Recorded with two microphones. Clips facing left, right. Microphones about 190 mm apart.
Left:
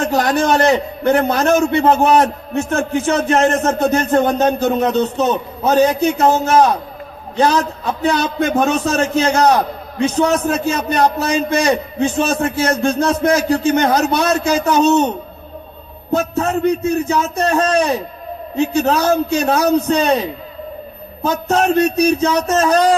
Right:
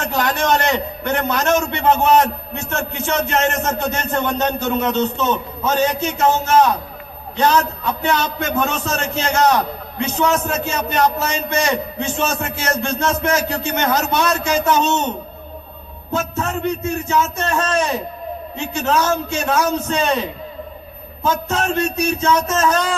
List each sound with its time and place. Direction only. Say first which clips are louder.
0.0 s a man's voice: left 5 dB; 35° left (ahead or behind)
16.1 s a man's voice: left 5 dB; 35° left (ahead or behind)